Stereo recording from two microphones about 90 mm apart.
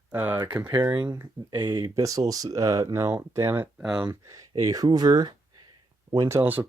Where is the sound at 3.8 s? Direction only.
10° right (ahead or behind).